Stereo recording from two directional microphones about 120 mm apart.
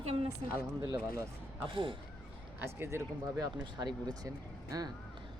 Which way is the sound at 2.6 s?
20° right (ahead or behind).